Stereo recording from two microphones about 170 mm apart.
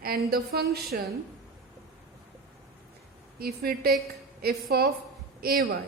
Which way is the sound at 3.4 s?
65° right (ahead or behind).